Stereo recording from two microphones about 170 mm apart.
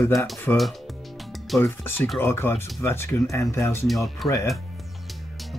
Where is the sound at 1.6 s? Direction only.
15° left (ahead or behind).